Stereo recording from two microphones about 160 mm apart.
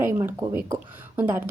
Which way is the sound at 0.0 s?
15° right (ahead or behind).